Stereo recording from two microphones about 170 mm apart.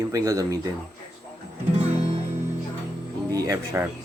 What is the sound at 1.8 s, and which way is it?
Music, 40° right (ahead or behind).